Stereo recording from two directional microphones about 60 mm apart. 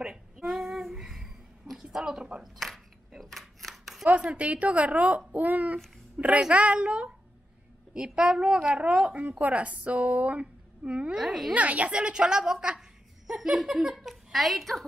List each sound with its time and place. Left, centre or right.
0.4 s a sound: centre
4.0 s a woman's voice: centre
11.1 s speech: centre
11.5 s a woman's voice: right; by 14.9 s centre